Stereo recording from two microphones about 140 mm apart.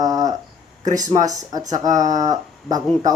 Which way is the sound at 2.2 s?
25° right (ahead or behind).